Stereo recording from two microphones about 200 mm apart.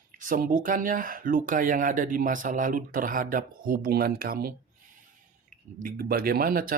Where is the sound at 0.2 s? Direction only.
45° right (ahead or behind).